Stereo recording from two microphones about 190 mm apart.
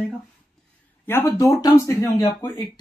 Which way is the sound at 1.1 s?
15° left (ahead or behind).